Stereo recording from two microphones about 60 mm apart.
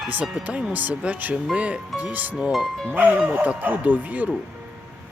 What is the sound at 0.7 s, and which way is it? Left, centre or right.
Speech, right.